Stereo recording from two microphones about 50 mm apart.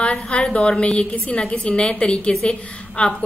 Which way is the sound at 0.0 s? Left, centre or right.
Left.